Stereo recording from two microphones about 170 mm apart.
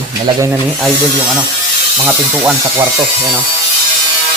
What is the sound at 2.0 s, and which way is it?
Speech, 5° right (ahead or behind).